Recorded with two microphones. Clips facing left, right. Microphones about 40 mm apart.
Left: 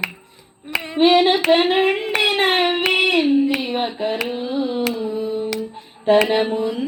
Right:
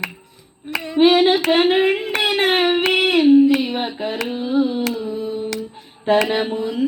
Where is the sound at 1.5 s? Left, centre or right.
Centre.